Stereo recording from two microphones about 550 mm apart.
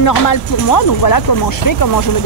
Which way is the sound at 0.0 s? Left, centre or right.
Left.